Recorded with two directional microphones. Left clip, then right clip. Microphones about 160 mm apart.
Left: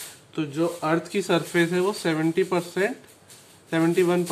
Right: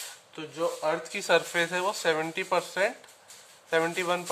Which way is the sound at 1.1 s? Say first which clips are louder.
Left 1 dB; 20° right (ahead or behind).